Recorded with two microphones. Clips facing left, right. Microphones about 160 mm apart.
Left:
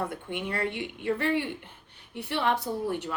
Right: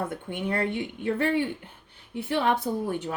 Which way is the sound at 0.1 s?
50° right (ahead or behind).